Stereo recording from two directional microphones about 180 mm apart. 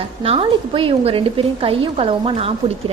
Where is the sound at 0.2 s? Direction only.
30° right (ahead or behind).